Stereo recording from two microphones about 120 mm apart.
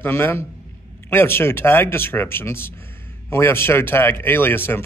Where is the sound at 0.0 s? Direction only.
20° left (ahead or behind).